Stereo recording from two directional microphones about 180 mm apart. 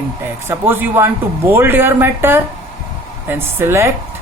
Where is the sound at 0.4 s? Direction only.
10° right (ahead or behind).